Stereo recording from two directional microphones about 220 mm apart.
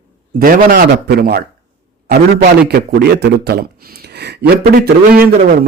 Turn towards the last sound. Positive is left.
turn(degrees=-40)  # may be behind; listen again after turning